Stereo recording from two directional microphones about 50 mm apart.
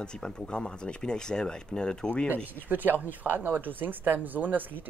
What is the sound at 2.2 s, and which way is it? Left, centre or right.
Speech, right.